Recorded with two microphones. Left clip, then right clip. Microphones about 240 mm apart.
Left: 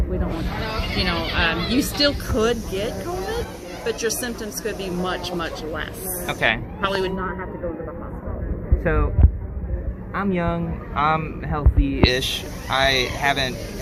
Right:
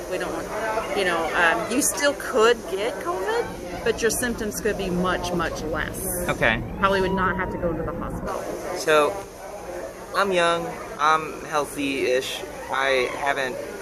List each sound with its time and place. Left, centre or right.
0.9 s speech: right
6.2 s speech: centre
6.8 s speech: right
10.2 s speech: centre